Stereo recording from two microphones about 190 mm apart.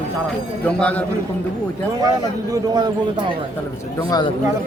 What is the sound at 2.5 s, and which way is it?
Speech, 20° right (ahead or behind).